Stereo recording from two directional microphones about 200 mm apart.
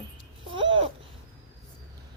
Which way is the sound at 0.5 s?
25° right (ahead or behind).